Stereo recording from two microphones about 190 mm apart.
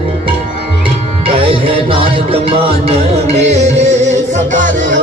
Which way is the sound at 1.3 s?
30° right (ahead or behind).